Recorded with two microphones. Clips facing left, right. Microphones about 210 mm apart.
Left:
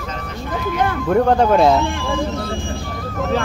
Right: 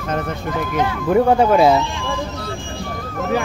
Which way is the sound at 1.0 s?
5° right (ahead or behind).